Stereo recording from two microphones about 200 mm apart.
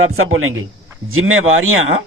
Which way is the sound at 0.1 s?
90° right.